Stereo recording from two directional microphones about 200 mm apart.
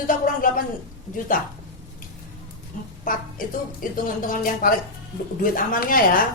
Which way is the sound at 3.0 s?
45° left (ahead or behind).